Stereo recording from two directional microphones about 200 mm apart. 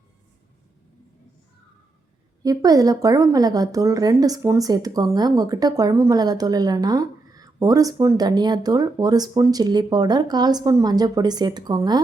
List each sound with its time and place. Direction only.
2.4 s a woman's voice: 20° right (ahead or behind)